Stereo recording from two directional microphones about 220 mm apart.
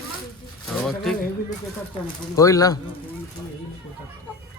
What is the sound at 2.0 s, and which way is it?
Speech, 15° left (ahead or behind).